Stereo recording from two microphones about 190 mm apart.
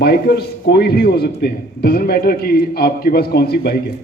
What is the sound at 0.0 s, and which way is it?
A man's voice, 55° left (ahead or behind).